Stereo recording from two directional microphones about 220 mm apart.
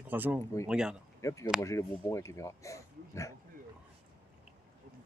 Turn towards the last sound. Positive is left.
turn(degrees=15)  # may be behind; listen again after turning